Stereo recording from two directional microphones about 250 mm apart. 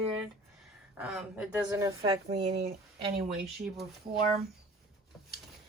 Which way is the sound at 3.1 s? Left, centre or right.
Right.